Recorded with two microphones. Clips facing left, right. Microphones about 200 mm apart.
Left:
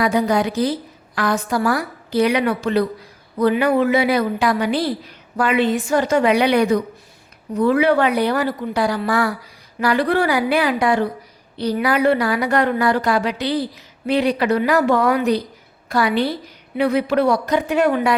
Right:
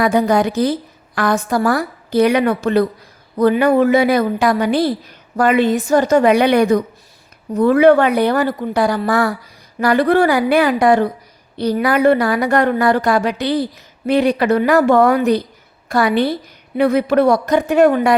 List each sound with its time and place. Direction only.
0.0 s a woman's voice: 50° right (ahead or behind)